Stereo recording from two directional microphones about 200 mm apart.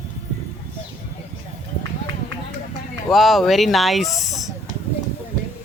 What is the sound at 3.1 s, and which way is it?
Speech, centre (ahead or behind).